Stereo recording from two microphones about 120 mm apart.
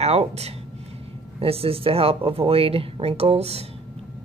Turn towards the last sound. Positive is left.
turn(degrees=-60)  # may be behind; listen again after turning